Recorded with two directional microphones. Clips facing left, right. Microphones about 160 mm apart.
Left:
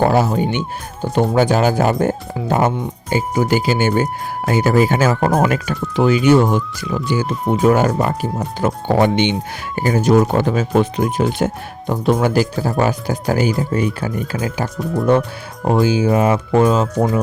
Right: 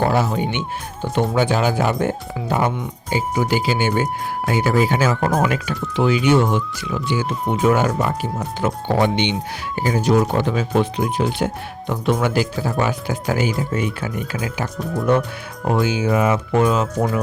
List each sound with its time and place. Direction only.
0.0 s speech: 40° left (ahead or behind)